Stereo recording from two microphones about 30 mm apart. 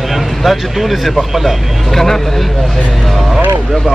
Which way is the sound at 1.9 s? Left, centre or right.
Centre.